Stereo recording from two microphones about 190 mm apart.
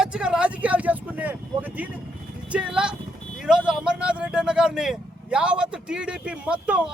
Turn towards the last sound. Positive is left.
turn(degrees=-5)  # may be behind; listen again after turning